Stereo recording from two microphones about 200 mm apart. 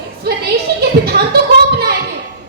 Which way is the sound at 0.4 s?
50° right (ahead or behind).